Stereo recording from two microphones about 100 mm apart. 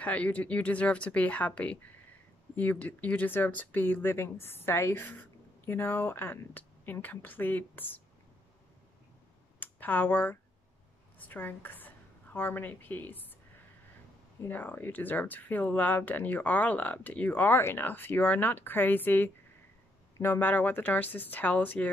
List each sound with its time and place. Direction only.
0.0 s speech: 15° left (ahead or behind)
9.6 s speech: 20° left (ahead or behind)
11.1 s a sound: 20° left (ahead or behind)
14.4 s speech: 15° left (ahead or behind)